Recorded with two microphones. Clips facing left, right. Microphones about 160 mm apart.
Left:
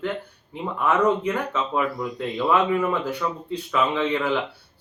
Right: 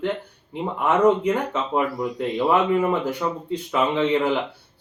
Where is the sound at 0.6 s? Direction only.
20° right (ahead or behind).